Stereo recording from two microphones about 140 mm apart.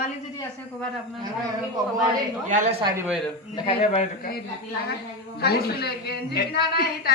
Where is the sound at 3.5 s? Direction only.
40° left (ahead or behind).